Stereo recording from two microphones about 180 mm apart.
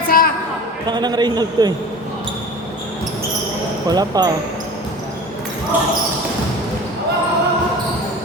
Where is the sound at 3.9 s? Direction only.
20° right (ahead or behind).